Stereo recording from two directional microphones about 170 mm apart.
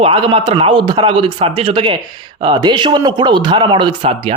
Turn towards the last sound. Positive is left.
turn(degrees=-30)  # may be behind; listen again after turning